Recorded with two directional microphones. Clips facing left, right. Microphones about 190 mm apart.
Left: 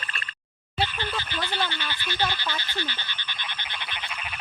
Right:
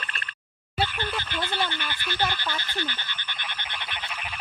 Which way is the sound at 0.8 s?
15° left (ahead or behind).